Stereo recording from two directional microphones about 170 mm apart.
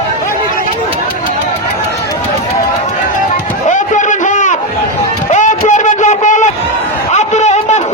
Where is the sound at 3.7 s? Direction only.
45° left (ahead or behind).